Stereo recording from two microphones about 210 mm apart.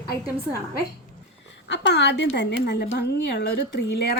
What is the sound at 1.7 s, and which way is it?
A woman's voice, 55° left (ahead or behind).